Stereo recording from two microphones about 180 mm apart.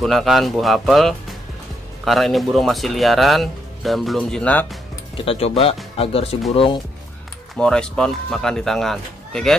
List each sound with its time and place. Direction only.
0.0 s speech: centre (ahead or behind)
5.1 s speech: 30° left (ahead or behind)
7.5 s speech: 5° left (ahead or behind)